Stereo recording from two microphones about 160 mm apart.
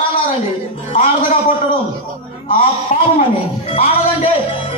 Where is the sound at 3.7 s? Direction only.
40° left (ahead or behind).